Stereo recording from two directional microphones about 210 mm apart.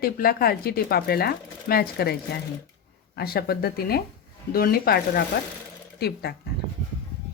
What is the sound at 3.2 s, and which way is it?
Speech, 45° left (ahead or behind).